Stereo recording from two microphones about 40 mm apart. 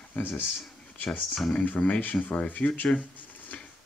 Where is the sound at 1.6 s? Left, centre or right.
Left.